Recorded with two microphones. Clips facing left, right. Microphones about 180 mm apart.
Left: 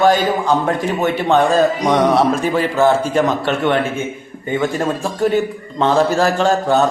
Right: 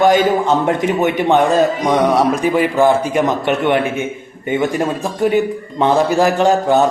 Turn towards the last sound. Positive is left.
turn(degrees=-15)  # may be behind; listen again after turning